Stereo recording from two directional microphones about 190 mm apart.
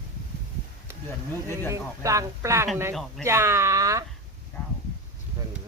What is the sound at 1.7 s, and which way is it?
Speech, 15° right (ahead or behind).